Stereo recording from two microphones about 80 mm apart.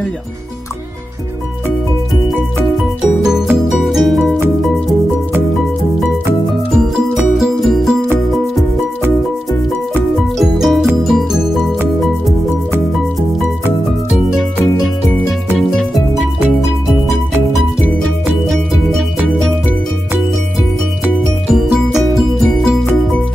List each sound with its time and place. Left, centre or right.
3.8 s music: centre
7.3 s music: centre
10.1 s music: centre